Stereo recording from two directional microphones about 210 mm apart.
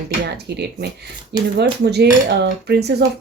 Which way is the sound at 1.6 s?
50° right (ahead or behind).